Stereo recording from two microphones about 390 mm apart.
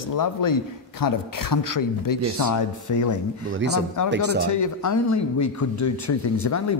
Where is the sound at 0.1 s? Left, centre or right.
Left.